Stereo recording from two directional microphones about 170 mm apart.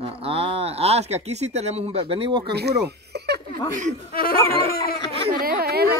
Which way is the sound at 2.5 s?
75° right (ahead or behind).